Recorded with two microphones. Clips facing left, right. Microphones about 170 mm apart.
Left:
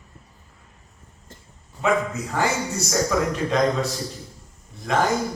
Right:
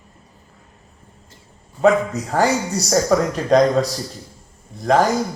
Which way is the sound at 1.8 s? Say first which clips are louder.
Right 7 dB; 40° right (ahead or behind).